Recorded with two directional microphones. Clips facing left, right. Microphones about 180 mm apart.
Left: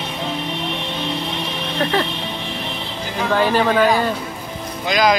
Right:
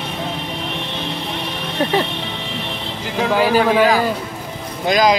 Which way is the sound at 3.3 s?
10° right (ahead or behind).